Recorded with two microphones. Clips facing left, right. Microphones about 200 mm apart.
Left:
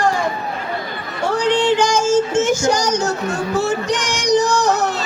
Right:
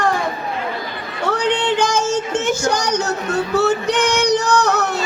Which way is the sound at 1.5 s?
60° right (ahead or behind).